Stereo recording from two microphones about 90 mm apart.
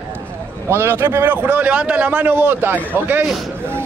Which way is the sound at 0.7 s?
30° right (ahead or behind).